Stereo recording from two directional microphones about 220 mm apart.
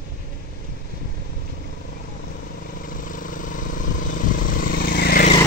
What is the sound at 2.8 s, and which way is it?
Vehicle, 40° left (ahead or behind).